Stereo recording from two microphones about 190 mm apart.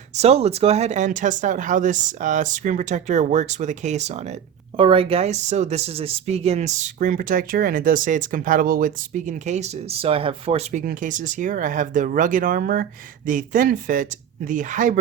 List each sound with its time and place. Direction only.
0.1 s speech: 35° right (ahead or behind)